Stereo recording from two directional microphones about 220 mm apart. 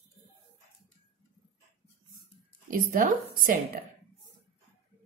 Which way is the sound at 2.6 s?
40° right (ahead or behind).